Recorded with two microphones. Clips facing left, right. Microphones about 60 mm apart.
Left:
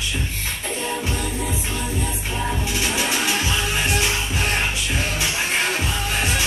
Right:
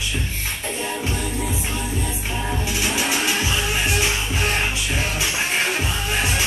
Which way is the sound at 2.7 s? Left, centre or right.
Centre.